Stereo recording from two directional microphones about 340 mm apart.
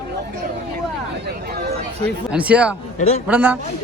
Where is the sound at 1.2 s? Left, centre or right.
Right.